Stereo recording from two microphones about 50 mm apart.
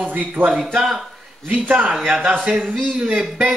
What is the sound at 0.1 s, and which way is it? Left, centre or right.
Speech, right.